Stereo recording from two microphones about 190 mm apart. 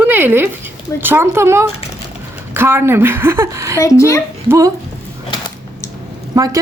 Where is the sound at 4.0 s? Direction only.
15° left (ahead or behind).